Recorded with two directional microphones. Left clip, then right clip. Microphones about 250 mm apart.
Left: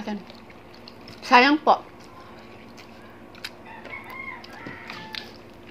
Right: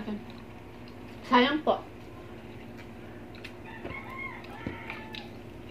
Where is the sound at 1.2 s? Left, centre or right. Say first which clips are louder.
Left 8 dB; left.